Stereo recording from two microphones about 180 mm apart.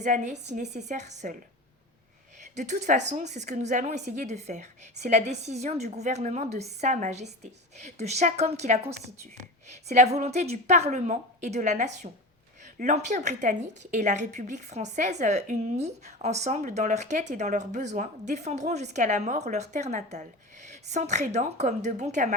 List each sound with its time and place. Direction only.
0.0 s a woman's voice: 40° right (ahead or behind)
2.6 s a woman's voice: 40° right (ahead or behind)